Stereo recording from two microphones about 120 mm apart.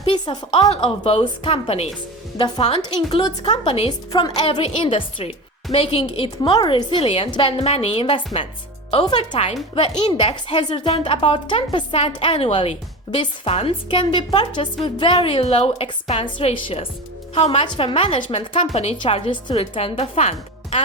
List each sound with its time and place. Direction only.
0.0 s a woman's voice: 45° left (ahead or behind)
0.7 s a woman's voice: 55° left (ahead or behind)
4.1 s a woman's voice: 35° left (ahead or behind)
4.4 s a woman's voice: 50° left (ahead or behind)